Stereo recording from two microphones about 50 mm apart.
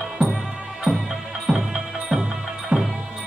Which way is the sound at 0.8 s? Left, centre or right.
Centre.